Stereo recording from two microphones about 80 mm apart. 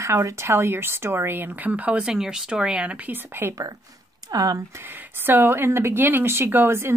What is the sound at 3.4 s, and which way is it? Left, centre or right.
Speech, right.